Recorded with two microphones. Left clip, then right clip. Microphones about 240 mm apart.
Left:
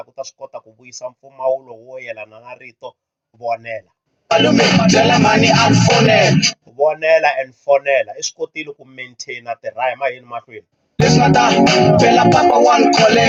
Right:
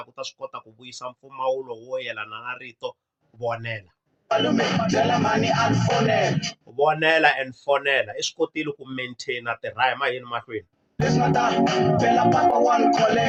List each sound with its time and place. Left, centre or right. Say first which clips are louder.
1.4 s speech: left 6 dB; centre
4.3 s music: left 9 dB; left
6.7 s speech: left 5 dB; centre
11.0 s music: left 9 dB; left